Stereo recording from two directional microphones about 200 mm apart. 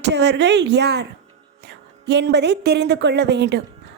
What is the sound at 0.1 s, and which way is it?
A woman's voice, 60° right (ahead or behind).